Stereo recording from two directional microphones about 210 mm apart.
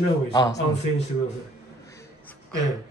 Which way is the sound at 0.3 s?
20° left (ahead or behind).